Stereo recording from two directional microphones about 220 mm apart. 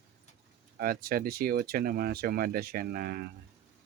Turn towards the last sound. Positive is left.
turn(degrees=-45)  # may be behind; listen again after turning